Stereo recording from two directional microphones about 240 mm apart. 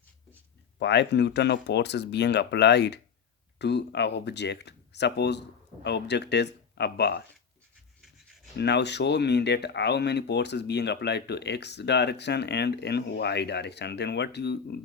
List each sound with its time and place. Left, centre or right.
0.8 s speech: left
8.5 s speech: left